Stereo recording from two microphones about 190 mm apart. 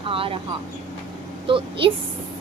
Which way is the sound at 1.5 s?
25° right (ahead or behind).